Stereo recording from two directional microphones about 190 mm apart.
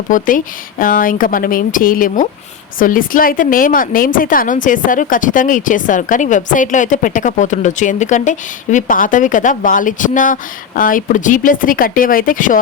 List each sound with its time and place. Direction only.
0.1 s a woman's voice: 45° left (ahead or behind)